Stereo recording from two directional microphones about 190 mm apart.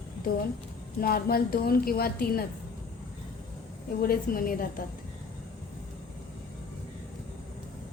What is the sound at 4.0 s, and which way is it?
Speech, 50° left (ahead or behind).